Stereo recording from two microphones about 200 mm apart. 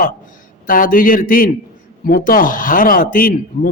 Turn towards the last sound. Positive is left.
turn(degrees=45)  # may be behind; listen again after turning